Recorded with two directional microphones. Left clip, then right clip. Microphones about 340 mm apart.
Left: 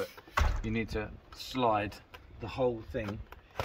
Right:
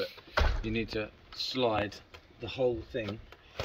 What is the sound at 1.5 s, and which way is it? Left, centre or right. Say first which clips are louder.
Speech: left 1 dB; centre.